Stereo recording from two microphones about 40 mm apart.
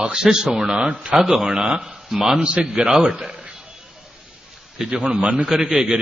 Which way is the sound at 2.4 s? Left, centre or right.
Right.